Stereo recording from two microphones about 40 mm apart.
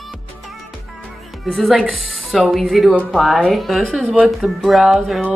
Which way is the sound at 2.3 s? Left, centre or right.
Centre.